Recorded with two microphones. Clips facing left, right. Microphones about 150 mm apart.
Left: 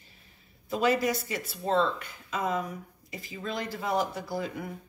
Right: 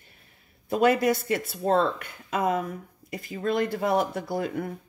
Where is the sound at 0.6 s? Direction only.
55° right (ahead or behind).